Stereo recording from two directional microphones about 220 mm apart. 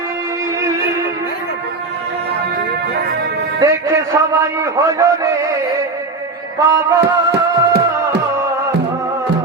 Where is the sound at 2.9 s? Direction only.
45° right (ahead or behind).